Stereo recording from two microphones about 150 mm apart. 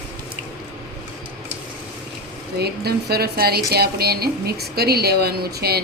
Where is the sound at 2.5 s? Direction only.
90° right.